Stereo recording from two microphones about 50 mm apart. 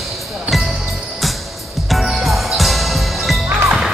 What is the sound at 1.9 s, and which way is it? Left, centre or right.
Music, centre.